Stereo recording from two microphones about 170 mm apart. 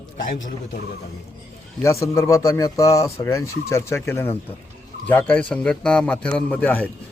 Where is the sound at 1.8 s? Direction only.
15° left (ahead or behind).